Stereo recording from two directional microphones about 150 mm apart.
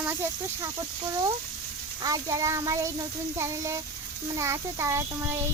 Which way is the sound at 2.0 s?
20° right (ahead or behind).